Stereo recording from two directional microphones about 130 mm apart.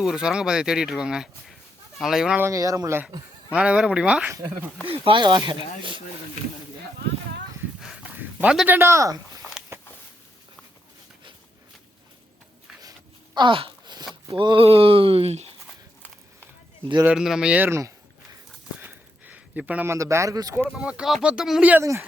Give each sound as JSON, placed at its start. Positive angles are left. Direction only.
{"t": 0.0, "sound": "speech", "side_deg": -5}
{"t": 2.4, "sound": "speech", "side_deg": -25}
{"t": 3.5, "sound": "speech", "side_deg": -10}
{"t": 4.3, "sound": "speech", "side_deg": -20}
{"t": 4.9, "sound": "speech", "side_deg": -40}
{"t": 7.8, "sound": "a sound", "side_deg": -5}
{"t": 8.6, "sound": "speech", "side_deg": -15}
{"t": 9.7, "sound": "a sound", "side_deg": -20}
{"t": 13.3, "sound": "speech", "side_deg": -40}
{"t": 17.2, "sound": "speech", "side_deg": -5}
{"t": 18.8, "sound": "a sound", "side_deg": -15}
{"t": 20.7, "sound": "speech", "side_deg": -5}